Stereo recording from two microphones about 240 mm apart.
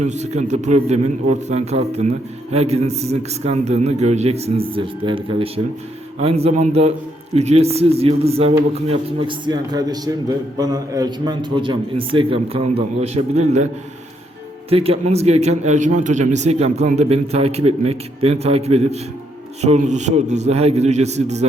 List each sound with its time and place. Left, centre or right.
0.0 s a man's voice: right
14.7 s a man's voice: right